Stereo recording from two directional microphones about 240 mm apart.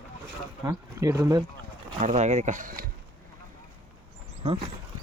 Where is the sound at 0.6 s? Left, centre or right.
Centre.